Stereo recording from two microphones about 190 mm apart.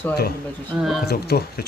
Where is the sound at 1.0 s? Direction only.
55° left (ahead or behind).